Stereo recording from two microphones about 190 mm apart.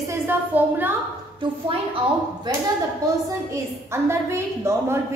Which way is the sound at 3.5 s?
15° right (ahead or behind).